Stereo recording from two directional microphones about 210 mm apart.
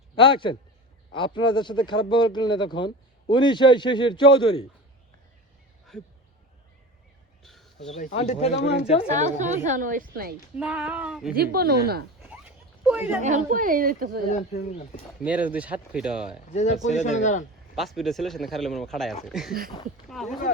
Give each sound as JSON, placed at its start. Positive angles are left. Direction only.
{"t": 0.2, "sound": "speech", "side_deg": 25}
{"t": 5.9, "sound": "speech", "side_deg": 5}
{"t": 7.4, "sound": "cricket", "side_deg": 0}
{"t": 7.9, "sound": "speech", "side_deg": 30}
{"t": 8.5, "sound": "speech", "side_deg": 50}
{"t": 9.0, "sound": "speech", "side_deg": -35}
{"t": 10.6, "sound": "speech", "side_deg": -5}
{"t": 11.3, "sound": "a woman's voice", "side_deg": -45}
{"t": 12.3, "sound": "a sound", "side_deg": -5}
{"t": 13.2, "sound": "speech", "side_deg": -35}
{"t": 14.3, "sound": "speech", "side_deg": 35}
{"t": 15.2, "sound": "speech", "side_deg": -5}
{"t": 16.5, "sound": "speech", "side_deg": 35}
{"t": 17.7, "sound": "speech", "side_deg": 0}